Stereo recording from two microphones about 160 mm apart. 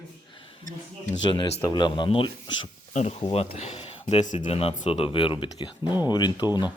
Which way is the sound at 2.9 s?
45° left (ahead or behind).